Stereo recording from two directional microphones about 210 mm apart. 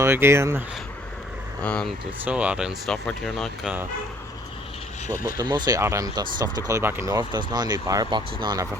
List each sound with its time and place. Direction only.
0.0 s speech: 10° right (ahead or behind)
1.6 s speech: 5° left (ahead or behind)
5.1 s speech: 15° right (ahead or behind)